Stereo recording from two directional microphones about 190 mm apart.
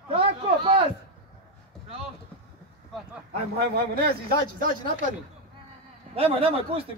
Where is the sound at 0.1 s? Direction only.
30° right (ahead or behind).